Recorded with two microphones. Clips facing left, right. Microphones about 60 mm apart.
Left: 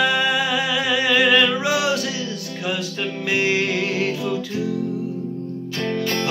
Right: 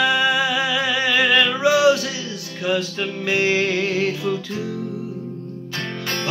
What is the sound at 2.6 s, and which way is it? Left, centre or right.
Music, centre.